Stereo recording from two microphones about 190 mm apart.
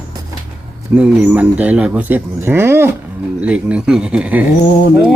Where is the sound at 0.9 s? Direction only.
10° right (ahead or behind).